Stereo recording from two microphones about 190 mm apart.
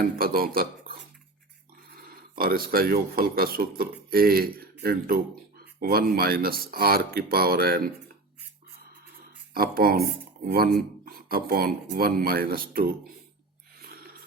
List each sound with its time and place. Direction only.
0.0 s speech: 50° right (ahead or behind)
2.0 s speech: 50° right (ahead or behind)
9.6 s speech: 50° right (ahead or behind)